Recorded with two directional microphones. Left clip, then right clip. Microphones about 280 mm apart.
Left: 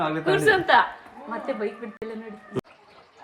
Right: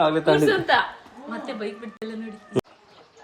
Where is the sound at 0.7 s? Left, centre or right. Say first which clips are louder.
Left 3 dB; left.